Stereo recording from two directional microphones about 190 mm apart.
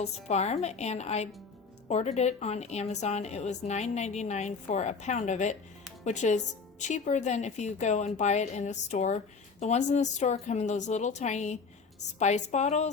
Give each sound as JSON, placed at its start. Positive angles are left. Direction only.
{"t": 0.0, "sound": "a woman's voice", "side_deg": 35}